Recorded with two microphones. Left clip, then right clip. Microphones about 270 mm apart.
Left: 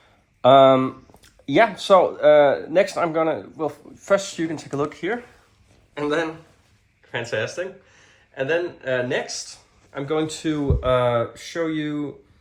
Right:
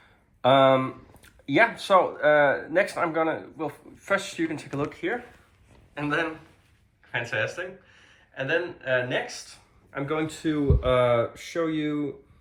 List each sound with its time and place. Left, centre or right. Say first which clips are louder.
0.4 s speech: left 6 dB; left
5.9 s speech: left 4 dB; left
9.9 s speech: left 4 dB; left
10.4 s speech: left 2 dB; centre